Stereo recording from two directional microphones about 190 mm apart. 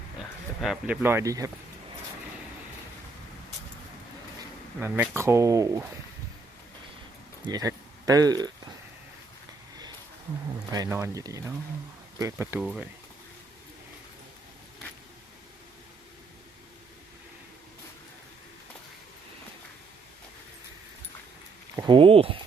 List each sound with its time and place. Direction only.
0.6 s speech: 5° right (ahead or behind)
4.8 s speech: 10° right (ahead or behind)
7.4 s speech: 20° right (ahead or behind)
10.7 s speech: 15° right (ahead or behind)
21.8 s speech: 25° right (ahead or behind)